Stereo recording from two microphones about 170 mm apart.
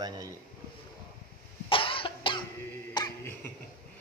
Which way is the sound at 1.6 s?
30° left (ahead or behind).